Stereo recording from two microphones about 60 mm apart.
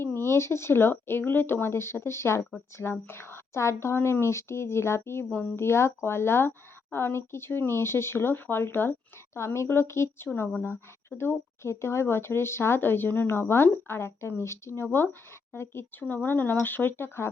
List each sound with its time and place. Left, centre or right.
0.0 s speech: left
9.4 s speech: left
16.0 s speech: left